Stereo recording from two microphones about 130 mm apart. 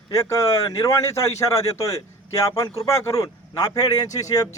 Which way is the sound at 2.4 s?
25° left (ahead or behind).